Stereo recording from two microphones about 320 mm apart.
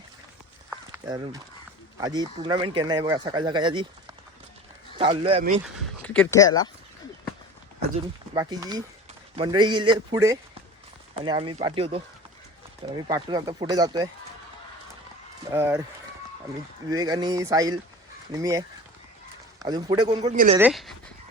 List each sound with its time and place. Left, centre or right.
0.7 s a sound: centre
2.0 s speech: centre
4.9 s speech: centre
5.6 s speech: centre
8.3 s speech: centre
13.1 s speech: centre
15.5 s speech: centre
16.9 s speech: centre
20.3 s a woman's voice: right
20.6 s speech: centre